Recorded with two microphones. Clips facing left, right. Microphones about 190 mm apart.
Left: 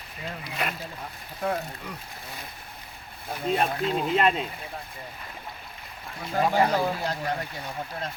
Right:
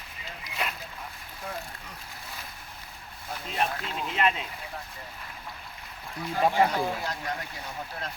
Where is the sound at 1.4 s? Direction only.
65° left (ahead or behind).